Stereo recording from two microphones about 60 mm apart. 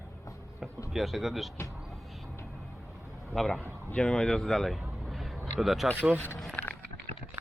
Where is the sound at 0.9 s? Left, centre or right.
Centre.